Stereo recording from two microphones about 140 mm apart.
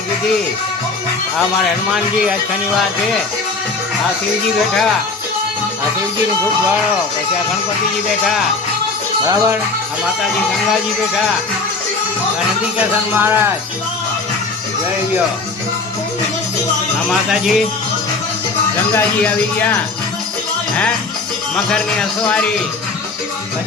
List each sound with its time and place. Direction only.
9.2 s speech: 25° right (ahead or behind)
13.1 s music: 15° right (ahead or behind)
17.1 s speech: centre (ahead or behind)
18.9 s speech: 10° left (ahead or behind)